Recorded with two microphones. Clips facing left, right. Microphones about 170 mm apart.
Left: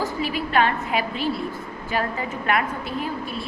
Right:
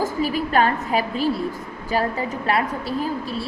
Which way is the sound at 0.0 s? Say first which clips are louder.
Right 3 dB; 45° right (ahead or behind).